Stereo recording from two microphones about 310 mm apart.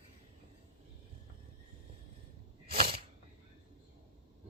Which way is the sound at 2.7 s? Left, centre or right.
Right.